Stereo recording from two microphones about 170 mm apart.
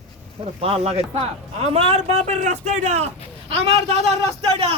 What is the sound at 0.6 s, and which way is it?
A man's voice, 35° right (ahead or behind).